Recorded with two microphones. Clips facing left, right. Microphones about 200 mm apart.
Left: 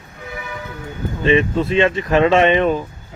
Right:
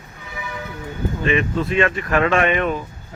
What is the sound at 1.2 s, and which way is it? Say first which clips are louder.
Speech: left 5 dB; 30° left (ahead or behind).